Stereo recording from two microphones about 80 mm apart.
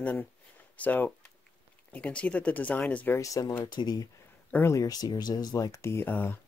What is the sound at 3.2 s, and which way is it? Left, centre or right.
Speech, left.